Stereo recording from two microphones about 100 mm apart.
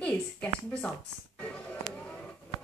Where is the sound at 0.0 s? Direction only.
10° left (ahead or behind).